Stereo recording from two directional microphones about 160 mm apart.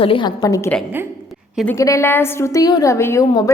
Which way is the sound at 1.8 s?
20° left (ahead or behind).